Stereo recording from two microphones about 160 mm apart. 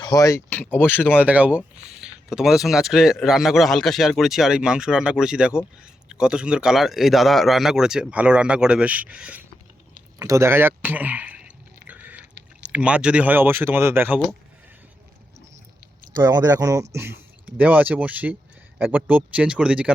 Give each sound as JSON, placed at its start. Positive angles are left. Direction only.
{"t": 0.0, "sound": "speech", "side_deg": 20}
{"t": 1.0, "sound": "speech", "side_deg": -10}
{"t": 10.2, "sound": "speech", "side_deg": -20}
{"t": 11.9, "sound": "chewing", "side_deg": -10}
{"t": 12.6, "sound": "speech", "side_deg": -10}
{"t": 16.1, "sound": "speech", "side_deg": -25}